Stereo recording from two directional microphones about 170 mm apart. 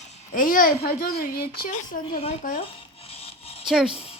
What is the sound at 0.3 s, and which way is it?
Speech, 55° left (ahead or behind).